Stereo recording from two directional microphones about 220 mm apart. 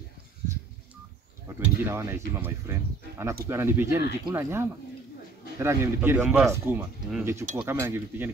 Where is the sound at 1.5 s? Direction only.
10° right (ahead or behind).